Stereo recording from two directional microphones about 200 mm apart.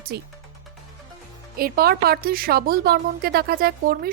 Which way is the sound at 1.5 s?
50° right (ahead or behind).